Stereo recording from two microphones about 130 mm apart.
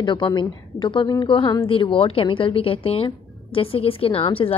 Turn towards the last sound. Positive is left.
turn(degrees=45)  # may be behind; listen again after turning